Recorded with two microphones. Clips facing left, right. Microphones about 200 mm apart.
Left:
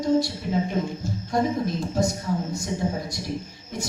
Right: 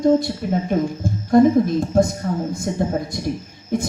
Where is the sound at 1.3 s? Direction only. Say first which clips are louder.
Right 11 dB; 55° right (ahead or behind).